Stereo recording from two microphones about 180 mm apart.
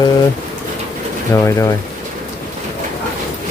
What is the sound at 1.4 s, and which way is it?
Speech, 15° left (ahead or behind).